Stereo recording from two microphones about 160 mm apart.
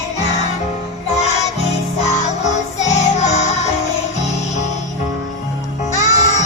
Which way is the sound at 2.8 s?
45° left (ahead or behind).